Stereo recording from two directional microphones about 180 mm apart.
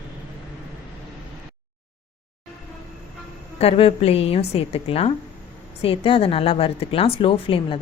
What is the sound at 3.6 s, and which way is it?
A woman's voice, 35° left (ahead or behind).